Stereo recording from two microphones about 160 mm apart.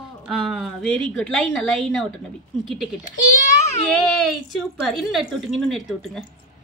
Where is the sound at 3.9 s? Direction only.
Centre (ahead or behind).